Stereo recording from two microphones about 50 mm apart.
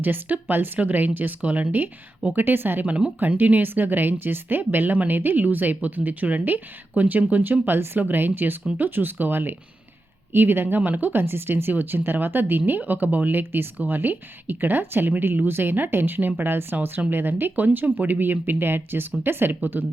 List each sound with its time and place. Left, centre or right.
0.0 s speech: right
2.8 s speech: right
3.2 s speech: right
13.4 s speech: right